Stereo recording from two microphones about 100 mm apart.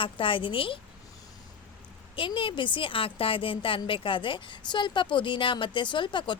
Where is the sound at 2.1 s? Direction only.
60° left (ahead or behind).